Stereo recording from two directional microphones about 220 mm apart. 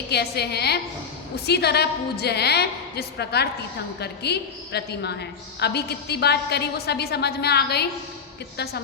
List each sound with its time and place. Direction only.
0.1 s a woman's voice: 50° left (ahead or behind)